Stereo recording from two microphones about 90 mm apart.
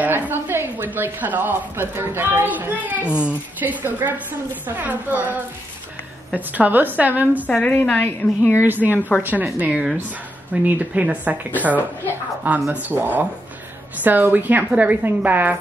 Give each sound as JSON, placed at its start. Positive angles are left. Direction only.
{"t": 0.0, "sound": "a woman's voice", "side_deg": -20}
{"t": 7.4, "sound": "a woman's voice", "side_deg": 15}
{"t": 8.6, "sound": "a woman's voice", "side_deg": -20}
{"t": 9.7, "sound": "a woman's voice", "side_deg": -5}